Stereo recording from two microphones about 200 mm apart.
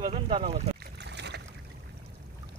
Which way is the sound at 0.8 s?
55° right (ahead or behind).